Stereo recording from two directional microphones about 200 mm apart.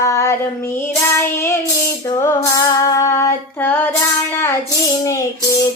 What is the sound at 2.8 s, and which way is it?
Female singing, 15° left (ahead or behind).